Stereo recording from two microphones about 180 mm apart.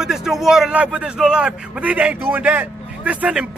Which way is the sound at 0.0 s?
5° right (ahead or behind).